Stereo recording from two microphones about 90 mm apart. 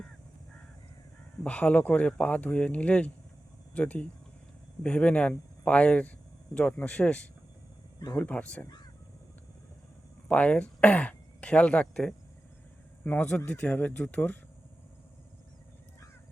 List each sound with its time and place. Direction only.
1.5 s speech: 15° left (ahead or behind)
10.2 s speech: 15° left (ahead or behind)